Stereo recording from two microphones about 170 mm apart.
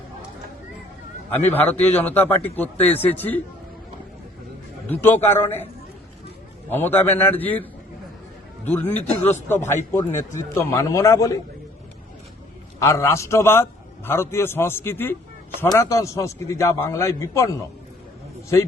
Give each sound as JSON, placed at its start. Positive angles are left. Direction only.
{"t": 1.5, "sound": "a man's voice", "side_deg": 10}
{"t": 4.9, "sound": "a man's voice", "side_deg": 10}
{"t": 6.7, "sound": "a man's voice", "side_deg": 10}
{"t": 12.8, "sound": "a man's voice", "side_deg": 15}